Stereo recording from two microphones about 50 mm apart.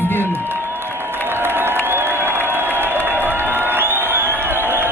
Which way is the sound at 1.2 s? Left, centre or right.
Right.